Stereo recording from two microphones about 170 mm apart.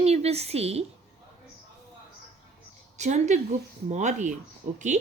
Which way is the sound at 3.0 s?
45° right (ahead or behind).